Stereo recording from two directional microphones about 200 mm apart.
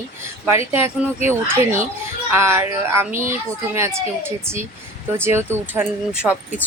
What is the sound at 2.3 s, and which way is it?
Speech, 10° right (ahead or behind).